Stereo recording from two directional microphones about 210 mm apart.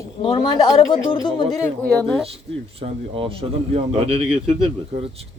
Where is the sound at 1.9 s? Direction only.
5° left (ahead or behind).